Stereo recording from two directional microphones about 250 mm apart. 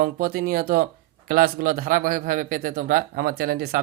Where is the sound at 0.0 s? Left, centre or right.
Right.